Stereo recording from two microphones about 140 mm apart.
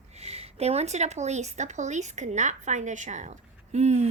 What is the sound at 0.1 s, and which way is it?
Speech, 50° right (ahead or behind).